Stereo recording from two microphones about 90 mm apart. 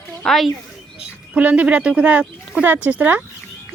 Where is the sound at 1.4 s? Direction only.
15° right (ahead or behind).